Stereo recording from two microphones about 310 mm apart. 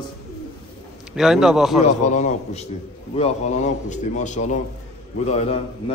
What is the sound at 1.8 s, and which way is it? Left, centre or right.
A man's voice, left.